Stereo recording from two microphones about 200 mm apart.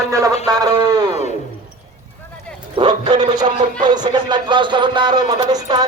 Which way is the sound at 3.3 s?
20° right (ahead or behind).